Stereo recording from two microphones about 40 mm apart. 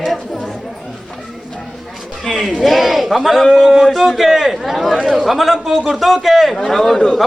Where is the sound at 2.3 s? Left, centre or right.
Centre.